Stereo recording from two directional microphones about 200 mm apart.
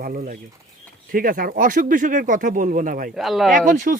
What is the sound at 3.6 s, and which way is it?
Speech, 40° right (ahead or behind).